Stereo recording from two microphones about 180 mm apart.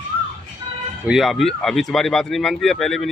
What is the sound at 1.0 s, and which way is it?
Speech, centre (ahead or behind).